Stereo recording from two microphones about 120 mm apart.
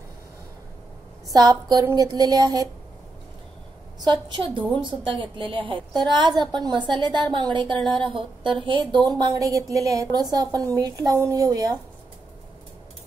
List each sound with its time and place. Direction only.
1.3 s a woman's voice: 30° right (ahead or behind)
4.0 s a woman's voice: 40° right (ahead or behind)